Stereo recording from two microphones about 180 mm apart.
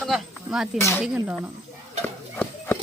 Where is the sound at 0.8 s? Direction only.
15° left (ahead or behind).